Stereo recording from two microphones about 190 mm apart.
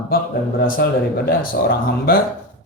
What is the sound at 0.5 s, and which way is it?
Speech, 50° left (ahead or behind).